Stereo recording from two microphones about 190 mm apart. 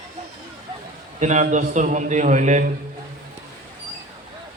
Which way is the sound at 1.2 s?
40° right (ahead or behind).